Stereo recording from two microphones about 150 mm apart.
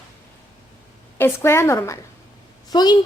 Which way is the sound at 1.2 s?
15° left (ahead or behind).